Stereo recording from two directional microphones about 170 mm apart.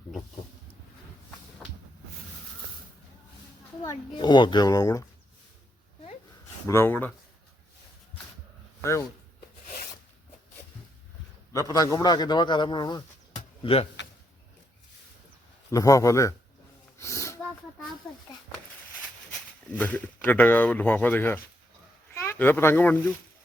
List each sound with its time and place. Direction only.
3.8 s a man's voice: 25° left (ahead or behind)
6.7 s speech: 15° left (ahead or behind)
8.8 s speech: 15° left (ahead or behind)
11.5 s a man's voice: 20° left (ahead or behind)
13.3 s a sound: 35° left (ahead or behind)
15.7 s a man's voice: 20° left (ahead or behind)
17.0 s a sound: 15° left (ahead or behind)
19.0 s speech: 10° left (ahead or behind)